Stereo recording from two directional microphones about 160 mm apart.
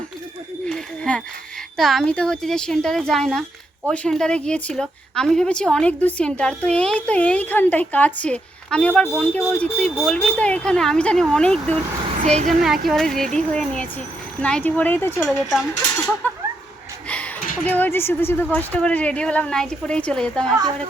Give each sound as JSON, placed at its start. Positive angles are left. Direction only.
{"t": 0.6, "sound": "a sound", "side_deg": 5}
{"t": 1.7, "sound": "a woman's voice", "side_deg": 0}
{"t": 9.9, "sound": "speech", "side_deg": -5}
{"t": 10.2, "sound": "speech", "side_deg": 10}
{"t": 12.2, "sound": "speech", "side_deg": -45}
{"t": 12.6, "sound": "a woman's voice", "side_deg": 0}
{"t": 15.3, "sound": "speech", "side_deg": 0}
{"t": 17.7, "sound": "a woman's voice", "side_deg": 10}